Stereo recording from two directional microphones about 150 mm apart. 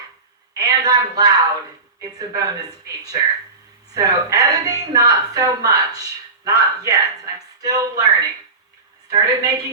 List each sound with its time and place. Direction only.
0.5 s a woman's voice: 25° right (ahead or behind)
9.0 s a woman's voice: 25° right (ahead or behind)